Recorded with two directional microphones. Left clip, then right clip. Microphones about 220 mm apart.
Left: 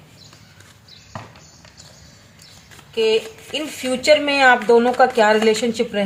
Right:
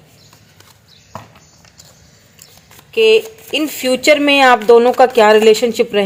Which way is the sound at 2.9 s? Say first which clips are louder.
Right 7 dB; 40° right (ahead or behind).